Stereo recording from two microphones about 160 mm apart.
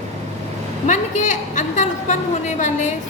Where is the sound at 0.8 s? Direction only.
50° left (ahead or behind).